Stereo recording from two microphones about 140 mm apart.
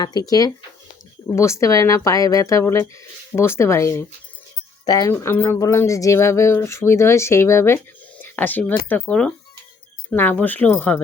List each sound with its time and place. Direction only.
0.0 s speech: 30° left (ahead or behind); by 11.0 s 10° left (ahead or behind)